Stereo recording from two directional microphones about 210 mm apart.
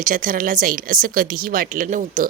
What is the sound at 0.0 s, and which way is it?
A woman's voice, 40° right (ahead or behind).